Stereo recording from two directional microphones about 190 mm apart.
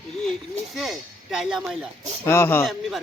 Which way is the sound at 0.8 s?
Centre (ahead or behind).